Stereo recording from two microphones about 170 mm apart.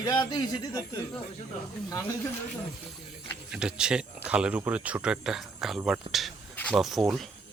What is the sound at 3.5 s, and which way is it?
Speech, 5° right (ahead or behind).